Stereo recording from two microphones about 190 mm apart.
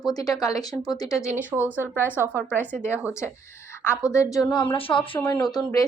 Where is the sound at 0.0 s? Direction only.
20° left (ahead or behind).